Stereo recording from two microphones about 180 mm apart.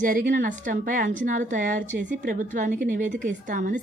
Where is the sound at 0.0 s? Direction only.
50° right (ahead or behind).